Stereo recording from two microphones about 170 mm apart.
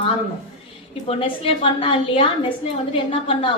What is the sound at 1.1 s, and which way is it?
A woman's voice, 35° left (ahead or behind).